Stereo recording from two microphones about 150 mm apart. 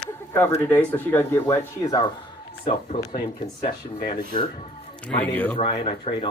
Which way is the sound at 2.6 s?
45° left (ahead or behind).